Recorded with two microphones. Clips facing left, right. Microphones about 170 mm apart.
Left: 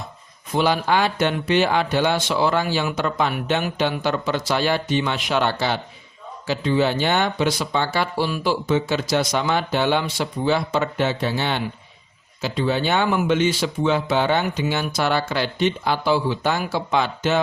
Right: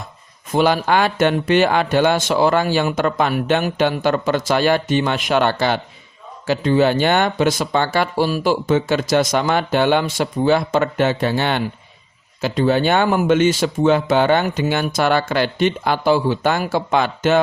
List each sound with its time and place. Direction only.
0.5 s a man's voice: 50° right (ahead or behind)